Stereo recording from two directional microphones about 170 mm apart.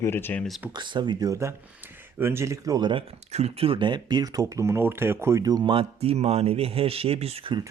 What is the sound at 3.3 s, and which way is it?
Speech, 40° right (ahead or behind).